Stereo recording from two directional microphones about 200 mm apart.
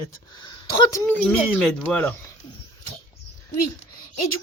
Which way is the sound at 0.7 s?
20° left (ahead or behind).